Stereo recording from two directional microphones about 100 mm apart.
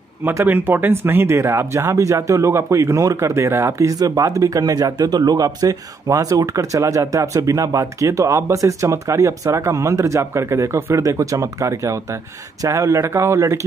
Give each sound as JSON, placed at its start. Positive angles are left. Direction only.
{"t": 0.2, "sound": "speech", "side_deg": -30}
{"t": 0.5, "sound": "speech", "side_deg": -20}